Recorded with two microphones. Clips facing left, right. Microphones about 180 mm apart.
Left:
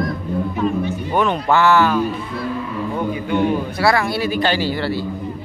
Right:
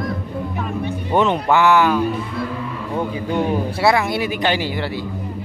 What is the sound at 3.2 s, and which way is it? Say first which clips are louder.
Speech: left 2 dB; 35° right (ahead or behind).